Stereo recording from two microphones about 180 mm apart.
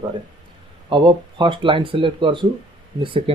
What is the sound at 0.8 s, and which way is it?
Speech, 25° right (ahead or behind).